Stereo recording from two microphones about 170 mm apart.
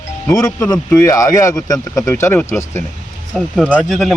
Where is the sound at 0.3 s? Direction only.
20° left (ahead or behind).